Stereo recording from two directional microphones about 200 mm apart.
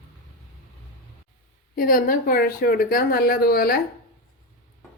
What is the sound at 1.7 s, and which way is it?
Speech, 45° left (ahead or behind).